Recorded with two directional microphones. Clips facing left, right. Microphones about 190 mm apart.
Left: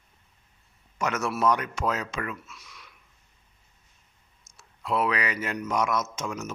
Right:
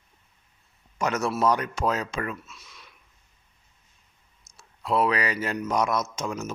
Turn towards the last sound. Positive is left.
turn(degrees=-35)  # may be behind; listen again after turning